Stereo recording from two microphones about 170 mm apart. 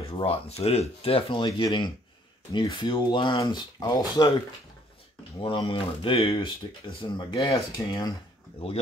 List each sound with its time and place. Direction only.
0.1 s speech: 35° left (ahead or behind)
5.4 s speech: 30° left (ahead or behind)
7.5 s speech: 20° left (ahead or behind)